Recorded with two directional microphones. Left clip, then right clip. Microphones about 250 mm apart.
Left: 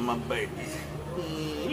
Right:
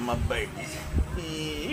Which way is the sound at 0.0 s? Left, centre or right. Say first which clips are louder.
Even; centre.